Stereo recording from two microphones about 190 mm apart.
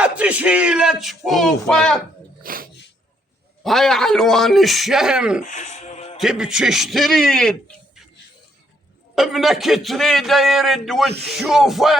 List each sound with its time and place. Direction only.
0.0 s a man's voice: 5° right (ahead or behind)
2.4 s a sound: 50° right (ahead or behind)
3.6 s a man's voice: centre (ahead or behind)
5.4 s music: 40° left (ahead or behind)
6.1 s a man's voice: 5° right (ahead or behind)
9.1 s a man's voice: centre (ahead or behind)